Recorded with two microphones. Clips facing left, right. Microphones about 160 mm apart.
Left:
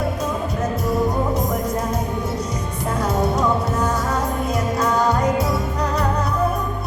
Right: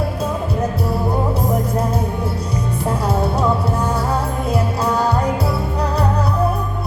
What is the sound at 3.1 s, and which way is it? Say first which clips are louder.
Music: even; 30° right (ahead or behind).